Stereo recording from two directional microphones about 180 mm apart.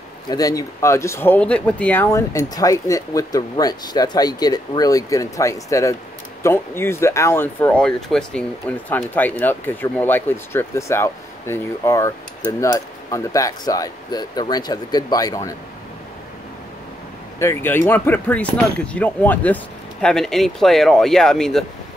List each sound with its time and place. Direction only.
0.3 s speech: 20° left (ahead or behind)
17.4 s speech: 15° left (ahead or behind)